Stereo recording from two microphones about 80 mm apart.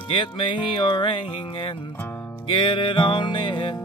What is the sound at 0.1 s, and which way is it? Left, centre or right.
Music, left.